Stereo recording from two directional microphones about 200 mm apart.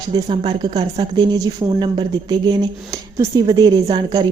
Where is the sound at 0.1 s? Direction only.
25° right (ahead or behind).